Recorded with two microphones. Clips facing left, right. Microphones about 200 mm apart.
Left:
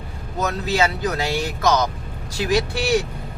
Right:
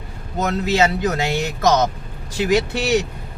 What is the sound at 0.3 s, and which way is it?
Speech, 25° right (ahead or behind).